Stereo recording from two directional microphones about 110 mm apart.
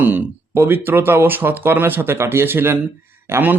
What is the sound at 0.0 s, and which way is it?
A man's voice, 20° right (ahead or behind).